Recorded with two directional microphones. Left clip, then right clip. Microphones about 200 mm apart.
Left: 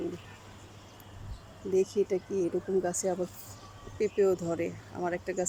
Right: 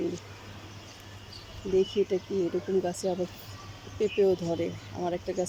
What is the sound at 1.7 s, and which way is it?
Speech, centre (ahead or behind).